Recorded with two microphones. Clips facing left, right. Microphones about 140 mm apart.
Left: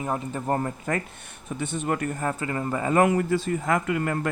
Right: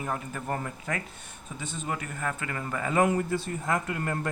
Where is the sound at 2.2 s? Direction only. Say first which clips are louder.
Left 5 dB; 30° left (ahead or behind).